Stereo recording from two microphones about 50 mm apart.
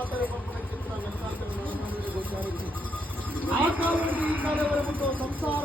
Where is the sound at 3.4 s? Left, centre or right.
Right.